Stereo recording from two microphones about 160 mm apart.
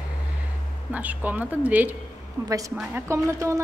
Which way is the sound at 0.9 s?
10° right (ahead or behind).